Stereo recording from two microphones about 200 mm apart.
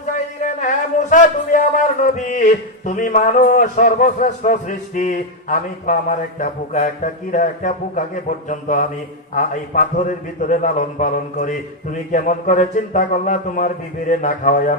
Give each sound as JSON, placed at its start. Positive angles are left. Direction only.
{"t": 0.4, "sound": "speech", "side_deg": 40}